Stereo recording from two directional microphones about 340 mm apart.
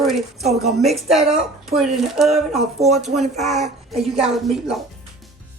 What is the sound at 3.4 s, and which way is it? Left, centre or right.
Speech, centre.